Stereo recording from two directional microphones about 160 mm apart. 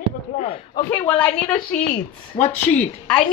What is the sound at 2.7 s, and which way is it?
Speech, 10° left (ahead or behind).